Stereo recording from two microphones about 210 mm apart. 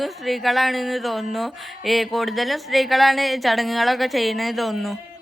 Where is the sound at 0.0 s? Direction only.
Centre (ahead or behind).